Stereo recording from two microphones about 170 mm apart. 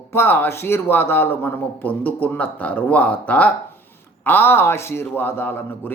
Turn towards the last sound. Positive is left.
turn(degrees=10)  # may be behind; listen again after turning